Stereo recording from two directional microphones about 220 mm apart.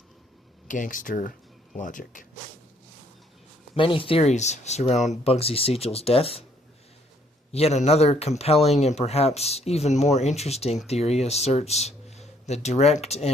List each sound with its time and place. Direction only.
0.7 s speech: 35° left (ahead or behind)
3.8 s speech: 25° left (ahead or behind)
7.5 s speech: 30° left (ahead or behind)